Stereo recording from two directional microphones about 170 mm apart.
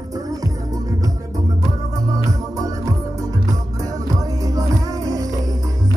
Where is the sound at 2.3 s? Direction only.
20° right (ahead or behind).